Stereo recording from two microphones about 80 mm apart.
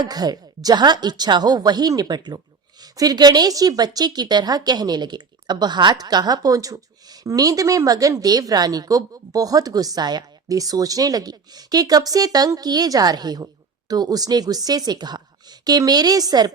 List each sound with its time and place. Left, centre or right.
0.0 s a woman's voice: right